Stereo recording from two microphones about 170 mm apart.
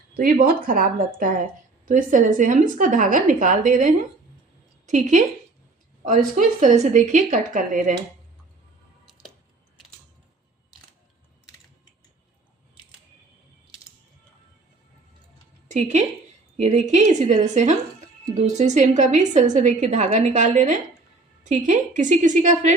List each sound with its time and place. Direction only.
0.2 s a woman's voice: 55° right (ahead or behind)
6.1 s a woman's voice: 50° right (ahead or behind)
15.7 s a woman's voice: 45° right (ahead or behind)